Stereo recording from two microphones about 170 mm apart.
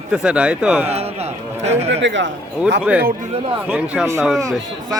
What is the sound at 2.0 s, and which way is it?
Speech, 90° right.